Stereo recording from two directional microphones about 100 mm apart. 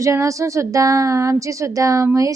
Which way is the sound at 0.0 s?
30° right (ahead or behind).